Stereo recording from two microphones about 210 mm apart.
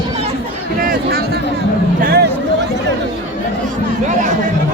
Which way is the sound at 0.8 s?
45° right (ahead or behind).